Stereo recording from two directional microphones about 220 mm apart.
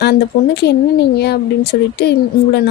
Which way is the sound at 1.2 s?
50° left (ahead or behind).